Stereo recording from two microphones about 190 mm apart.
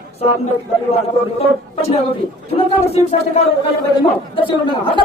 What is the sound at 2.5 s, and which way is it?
A man's voice, 35° left (ahead or behind).